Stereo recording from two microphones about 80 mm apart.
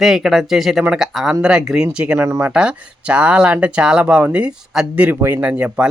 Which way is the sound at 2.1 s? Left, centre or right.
Right.